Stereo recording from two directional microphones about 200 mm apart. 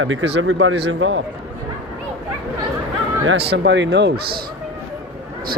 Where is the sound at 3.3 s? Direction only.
60° right (ahead or behind).